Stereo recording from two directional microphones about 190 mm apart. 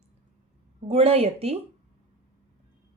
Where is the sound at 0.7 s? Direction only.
35° right (ahead or behind).